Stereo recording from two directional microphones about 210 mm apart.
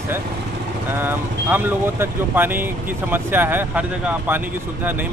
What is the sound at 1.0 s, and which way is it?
Speech, 10° right (ahead or behind).